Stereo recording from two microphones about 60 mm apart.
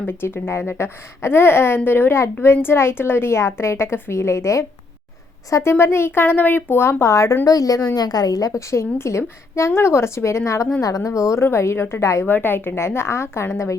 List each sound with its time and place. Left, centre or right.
0.0 s a woman's voice: left
5.6 s a woman's voice: left
7.4 s a woman's voice: left
8.7 s a woman's voice: left
10.8 s a woman's voice: left
11.4 s a woman's voice: left
12.2 s a woman's voice: left